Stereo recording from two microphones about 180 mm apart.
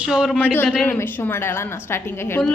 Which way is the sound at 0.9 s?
10° left (ahead or behind).